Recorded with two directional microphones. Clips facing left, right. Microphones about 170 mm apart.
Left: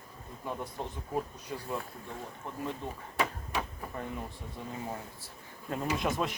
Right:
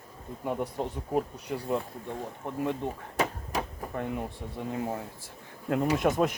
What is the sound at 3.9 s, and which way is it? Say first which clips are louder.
Speech: right 6 dB; 60° right (ahead or behind).